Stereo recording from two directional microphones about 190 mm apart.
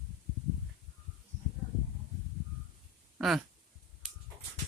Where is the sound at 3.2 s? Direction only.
Centre (ahead or behind).